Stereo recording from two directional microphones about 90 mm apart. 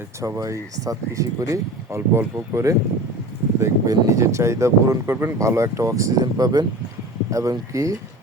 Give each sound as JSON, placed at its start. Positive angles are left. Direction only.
{"t": 0.2, "sound": "speech", "side_deg": -35}